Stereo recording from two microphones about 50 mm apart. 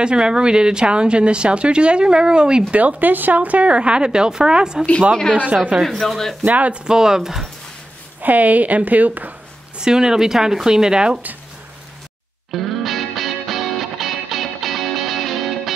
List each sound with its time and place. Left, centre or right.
0.0 s speech: centre
2.7 s speech: right
5.3 s speech: right
5.9 s speech: centre
6.4 s speech: right
6.8 s speech: centre
8.2 s speech: right
9.8 s speech: centre
12.4 s music: centre